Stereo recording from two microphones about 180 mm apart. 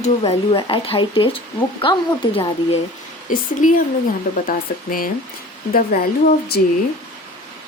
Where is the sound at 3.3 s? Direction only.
50° left (ahead or behind).